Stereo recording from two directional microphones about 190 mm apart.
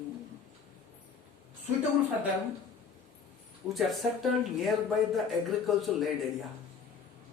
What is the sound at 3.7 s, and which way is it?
Speech, centre (ahead or behind).